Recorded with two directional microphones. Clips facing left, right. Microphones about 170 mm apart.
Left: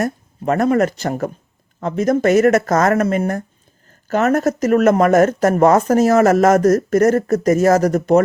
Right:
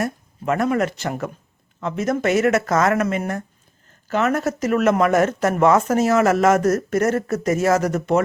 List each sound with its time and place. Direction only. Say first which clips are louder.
0.0 s speech: left 4 dB; 40° left (ahead or behind)